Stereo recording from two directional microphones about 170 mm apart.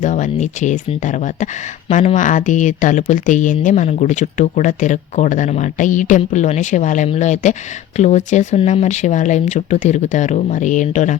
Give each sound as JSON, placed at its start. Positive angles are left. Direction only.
{"t": 0.0, "sound": "speech", "side_deg": 45}